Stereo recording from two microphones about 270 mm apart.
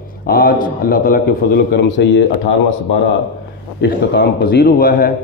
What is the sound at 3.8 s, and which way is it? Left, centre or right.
A man's voice, left.